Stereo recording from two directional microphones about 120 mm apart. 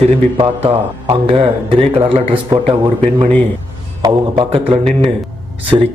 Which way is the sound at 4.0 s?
40° right (ahead or behind).